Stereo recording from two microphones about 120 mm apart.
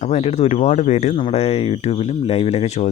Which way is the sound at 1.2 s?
60° left (ahead or behind).